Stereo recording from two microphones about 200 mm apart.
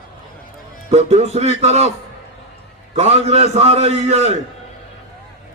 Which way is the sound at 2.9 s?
35° right (ahead or behind).